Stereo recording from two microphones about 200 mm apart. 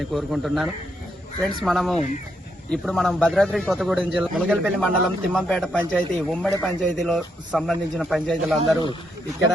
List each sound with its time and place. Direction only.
0.1 s speech: centre (ahead or behind)